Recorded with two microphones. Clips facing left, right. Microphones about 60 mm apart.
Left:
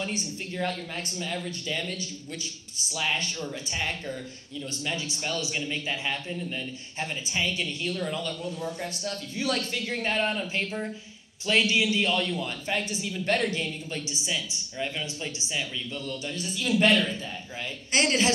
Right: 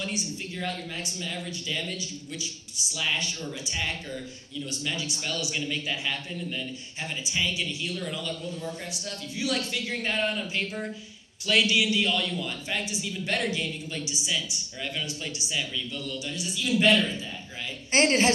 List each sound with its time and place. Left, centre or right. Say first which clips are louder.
0.0 s speech: even; left
17.9 s a woman's voice: right 2 dB; right